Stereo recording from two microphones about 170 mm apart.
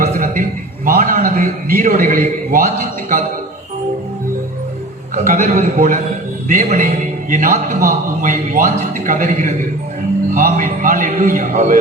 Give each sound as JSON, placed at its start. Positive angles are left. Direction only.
{"t": 0.0, "sound": "a sound", "side_deg": -50}
{"t": 0.9, "sound": "a man's voice", "side_deg": -50}
{"t": 5.1, "sound": "a man's voice", "side_deg": -45}